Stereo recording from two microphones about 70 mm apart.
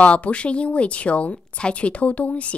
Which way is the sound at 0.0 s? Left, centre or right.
Centre.